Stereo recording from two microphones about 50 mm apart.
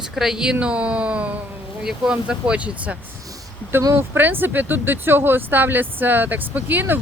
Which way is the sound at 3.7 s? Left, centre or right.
Right.